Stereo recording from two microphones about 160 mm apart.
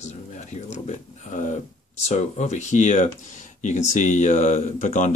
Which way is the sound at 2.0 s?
45° left (ahead or behind).